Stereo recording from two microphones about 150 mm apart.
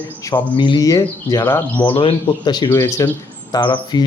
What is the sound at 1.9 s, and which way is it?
A man's voice, 35° left (ahead or behind).